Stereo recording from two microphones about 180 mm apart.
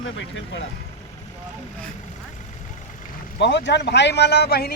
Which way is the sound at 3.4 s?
75° left (ahead or behind).